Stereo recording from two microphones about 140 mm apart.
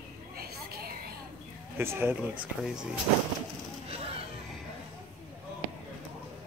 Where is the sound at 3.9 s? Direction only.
45° right (ahead or behind).